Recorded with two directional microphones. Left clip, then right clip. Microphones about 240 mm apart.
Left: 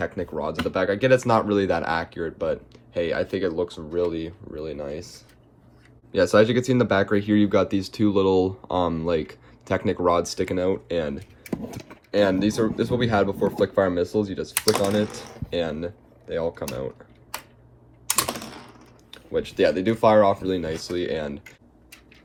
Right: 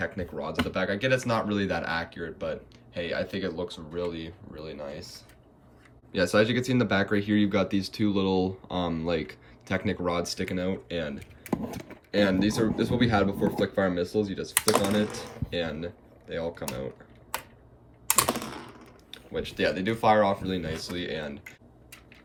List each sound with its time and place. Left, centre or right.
0.0 s speech: centre; by 5.2 s left
6.1 s speech: centre
19.1 s speech: centre